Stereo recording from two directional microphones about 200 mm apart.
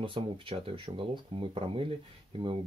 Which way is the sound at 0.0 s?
25° right (ahead or behind).